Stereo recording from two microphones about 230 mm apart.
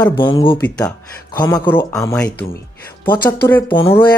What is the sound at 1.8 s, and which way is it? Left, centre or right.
Speech, centre.